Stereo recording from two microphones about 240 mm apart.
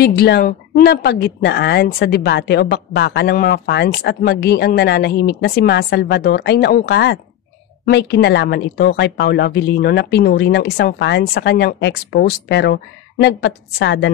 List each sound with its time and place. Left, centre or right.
0.0 s speech: left